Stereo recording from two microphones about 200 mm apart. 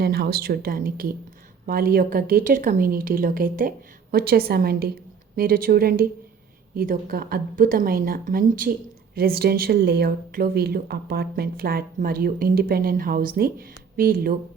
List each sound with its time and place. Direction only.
0.0 s speech: 50° right (ahead or behind)